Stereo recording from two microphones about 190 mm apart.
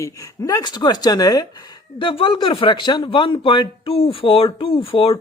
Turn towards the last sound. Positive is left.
turn(degrees=30)  # may be behind; listen again after turning